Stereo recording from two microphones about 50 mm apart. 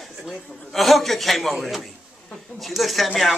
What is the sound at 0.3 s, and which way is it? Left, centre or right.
A man's voice, centre.